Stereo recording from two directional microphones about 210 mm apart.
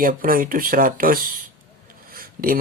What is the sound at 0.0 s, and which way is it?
Speech, 40° right (ahead or behind).